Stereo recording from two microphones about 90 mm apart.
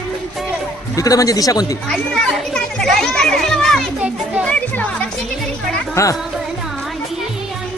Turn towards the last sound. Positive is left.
turn(degrees=35)  # may be behind; listen again after turning